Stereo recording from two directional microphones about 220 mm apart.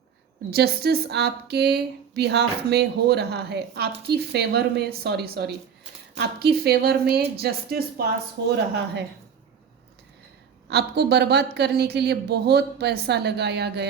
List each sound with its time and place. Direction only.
0.5 s speech: 45° right (ahead or behind)
10.7 s speech: 50° right (ahead or behind)